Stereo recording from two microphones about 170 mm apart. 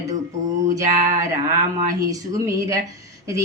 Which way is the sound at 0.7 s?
15° right (ahead or behind).